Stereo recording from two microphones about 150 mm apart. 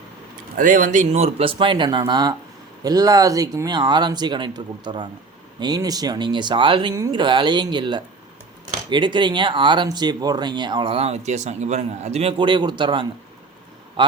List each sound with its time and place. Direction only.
0.5 s speech: 60° right (ahead or behind)
12.4 s a man's voice: 30° right (ahead or behind)